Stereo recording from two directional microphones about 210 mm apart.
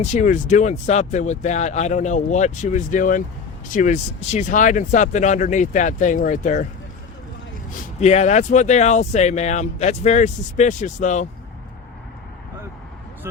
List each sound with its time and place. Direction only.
0.0 s speech: 35° left (ahead or behind)
8.0 s speech: 30° left (ahead or behind)